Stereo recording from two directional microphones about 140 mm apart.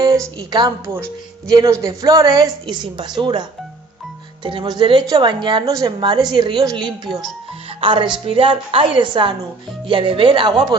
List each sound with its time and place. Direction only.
0.4 s a woman's voice: 30° right (ahead or behind)